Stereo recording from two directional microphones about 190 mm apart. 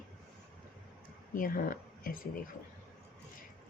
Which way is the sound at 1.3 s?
45° left (ahead or behind).